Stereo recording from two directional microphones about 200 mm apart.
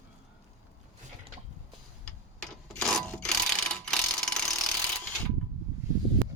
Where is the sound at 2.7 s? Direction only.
Centre (ahead or behind).